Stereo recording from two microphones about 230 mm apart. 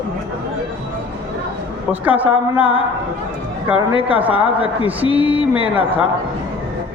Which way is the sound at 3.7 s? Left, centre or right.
Centre.